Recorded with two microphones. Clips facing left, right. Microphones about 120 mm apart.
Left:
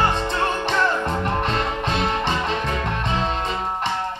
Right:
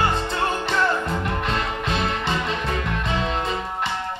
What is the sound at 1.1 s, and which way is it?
Music, 40° left (ahead or behind).